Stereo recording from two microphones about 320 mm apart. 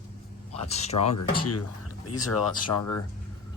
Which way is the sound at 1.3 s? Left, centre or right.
Left.